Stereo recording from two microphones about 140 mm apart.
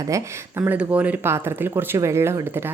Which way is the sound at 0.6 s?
10° right (ahead or behind).